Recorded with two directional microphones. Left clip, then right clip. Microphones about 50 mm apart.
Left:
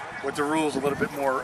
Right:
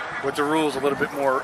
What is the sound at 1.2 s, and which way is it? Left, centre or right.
Speech, left.